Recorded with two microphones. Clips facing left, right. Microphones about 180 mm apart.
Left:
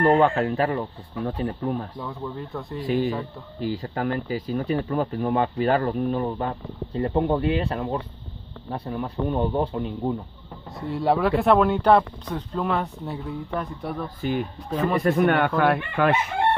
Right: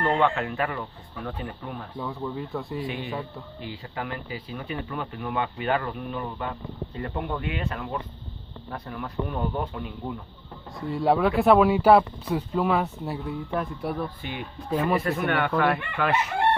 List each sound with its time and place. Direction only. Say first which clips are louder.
0.2 s speech: left 4 dB; 35° left (ahead or behind)
2.0 s speech: right 1 dB; 5° right (ahead or behind)
2.8 s speech: left 7 dB; 40° left (ahead or behind)
10.8 s speech: even; centre (ahead or behind)
14.2 s a man's voice: left 9 dB; 45° left (ahead or behind)
14.7 s speech: even; 5° right (ahead or behind)
15.0 s a man's voice: left 5 dB; 50° left (ahead or behind)